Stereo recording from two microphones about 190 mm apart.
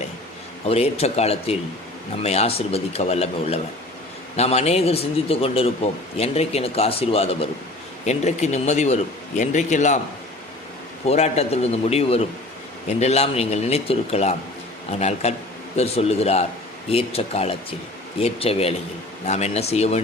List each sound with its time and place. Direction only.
0.7 s a man's voice: 35° left (ahead or behind)
11.0 s a man's voice: 35° left (ahead or behind)